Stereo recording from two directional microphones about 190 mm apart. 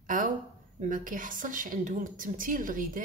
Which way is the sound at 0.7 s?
45° right (ahead or behind).